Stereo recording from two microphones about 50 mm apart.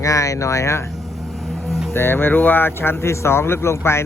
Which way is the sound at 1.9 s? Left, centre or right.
Left.